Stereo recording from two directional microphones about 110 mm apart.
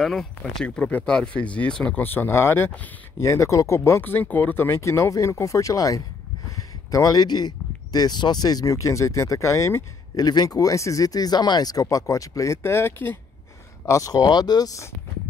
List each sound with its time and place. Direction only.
0.0 s speech: 5° left (ahead or behind); by 10.2 s 25° left (ahead or behind)
10.2 s speech: 35° left (ahead or behind); by 13.2 s 20° left (ahead or behind)
13.8 s speech: 30° left (ahead or behind)